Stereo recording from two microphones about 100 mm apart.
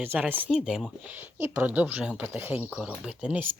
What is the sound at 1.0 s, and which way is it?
Speech, 20° right (ahead or behind).